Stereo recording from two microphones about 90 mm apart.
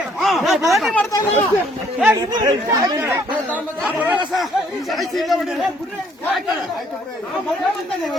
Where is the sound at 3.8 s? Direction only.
20° right (ahead or behind).